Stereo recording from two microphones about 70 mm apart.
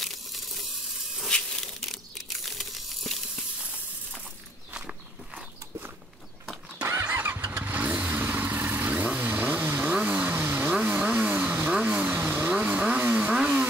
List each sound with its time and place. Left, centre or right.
0.0 s a sound: centre
1.9 s tearing: centre
4.7 s walk: centre
6.9 s vehicle: right; by 13.7 s centre